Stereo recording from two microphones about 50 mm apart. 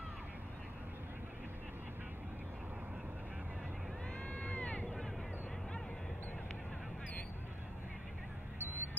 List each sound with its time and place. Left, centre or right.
4.3 s crowd: left
4.8 s vehicle: centre
8.5 s a sound: right